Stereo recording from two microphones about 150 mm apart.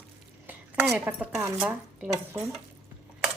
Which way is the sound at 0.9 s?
10° right (ahead or behind).